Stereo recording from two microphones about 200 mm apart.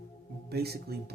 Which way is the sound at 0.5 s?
55° right (ahead or behind).